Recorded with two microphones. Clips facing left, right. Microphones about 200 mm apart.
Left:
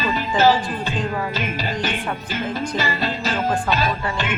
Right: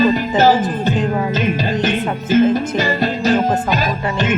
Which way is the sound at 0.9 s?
20° right (ahead or behind).